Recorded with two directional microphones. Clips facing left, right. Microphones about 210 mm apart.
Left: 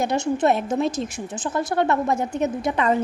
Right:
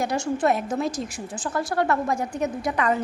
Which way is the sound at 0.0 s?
25° left (ahead or behind).